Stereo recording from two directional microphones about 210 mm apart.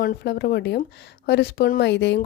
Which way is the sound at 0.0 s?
45° left (ahead or behind).